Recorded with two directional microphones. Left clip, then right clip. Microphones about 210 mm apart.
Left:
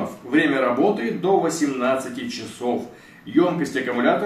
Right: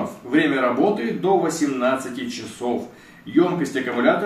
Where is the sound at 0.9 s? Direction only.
5° right (ahead or behind).